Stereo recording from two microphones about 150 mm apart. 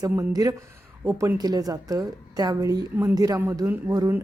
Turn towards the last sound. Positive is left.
turn(degrees=-20)  # may be behind; listen again after turning